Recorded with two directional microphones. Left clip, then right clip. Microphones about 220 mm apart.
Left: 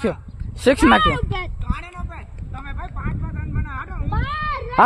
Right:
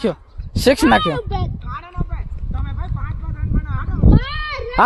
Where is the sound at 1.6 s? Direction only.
50° left (ahead or behind).